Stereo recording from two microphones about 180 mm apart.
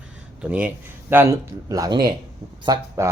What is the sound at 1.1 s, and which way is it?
Speech, 15° right (ahead or behind).